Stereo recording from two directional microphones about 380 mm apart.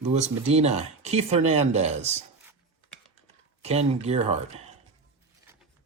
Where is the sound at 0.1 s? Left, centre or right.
Centre.